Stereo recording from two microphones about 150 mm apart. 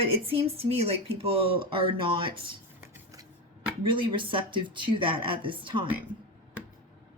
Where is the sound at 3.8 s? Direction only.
35° right (ahead or behind).